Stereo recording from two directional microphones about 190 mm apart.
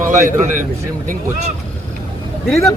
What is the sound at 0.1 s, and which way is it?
Speech, 40° right (ahead or behind).